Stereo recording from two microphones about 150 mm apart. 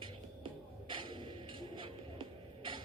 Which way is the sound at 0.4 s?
35° right (ahead or behind).